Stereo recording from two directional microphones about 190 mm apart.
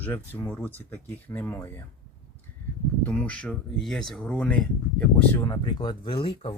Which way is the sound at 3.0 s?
5° left (ahead or behind).